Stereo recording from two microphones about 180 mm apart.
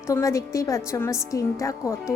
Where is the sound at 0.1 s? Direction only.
15° left (ahead or behind).